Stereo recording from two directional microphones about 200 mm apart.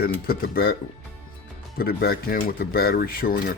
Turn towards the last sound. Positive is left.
turn(degrees=50)  # may be behind; listen again after turning